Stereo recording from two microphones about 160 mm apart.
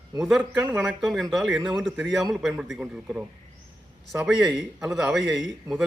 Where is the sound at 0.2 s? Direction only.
Centre (ahead or behind).